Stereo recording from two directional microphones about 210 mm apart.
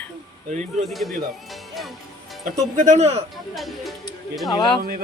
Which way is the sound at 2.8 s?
35° right (ahead or behind).